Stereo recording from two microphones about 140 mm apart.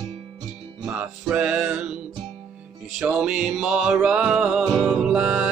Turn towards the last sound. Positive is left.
turn(degrees=-10)  # may be behind; listen again after turning